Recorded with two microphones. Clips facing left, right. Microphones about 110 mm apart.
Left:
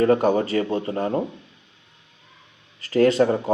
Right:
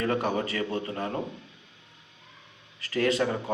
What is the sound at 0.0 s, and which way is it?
Speech, 40° left (ahead or behind).